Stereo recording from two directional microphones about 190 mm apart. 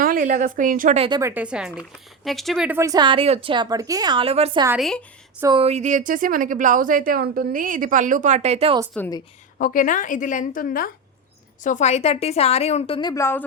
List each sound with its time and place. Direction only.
0.0 s a woman's voice: 45° right (ahead or behind)
0.9 s a woman's voice: 30° right (ahead or behind)
1.2 s a woman's voice: 10° right (ahead or behind); by 4.6 s 30° right (ahead or behind)
4.8 s speech: centre (ahead or behind)
5.5 s speech: 35° right (ahead or behind)
9.6 s a woman's voice: 45° left (ahead or behind); by 13.4 s 15° left (ahead or behind)